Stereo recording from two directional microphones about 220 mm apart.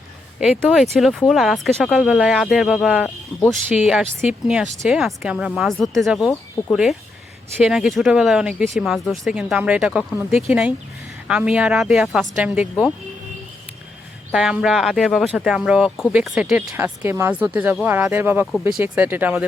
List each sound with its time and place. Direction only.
0.3 s speech: 5° right (ahead or behind)
14.3 s speech: 5° right (ahead or behind)